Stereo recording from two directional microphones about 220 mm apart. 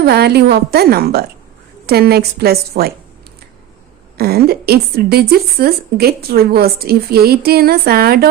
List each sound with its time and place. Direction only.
0.0 s a woman's voice: 45° right (ahead or behind)
4.2 s a woman's voice: 45° right (ahead or behind)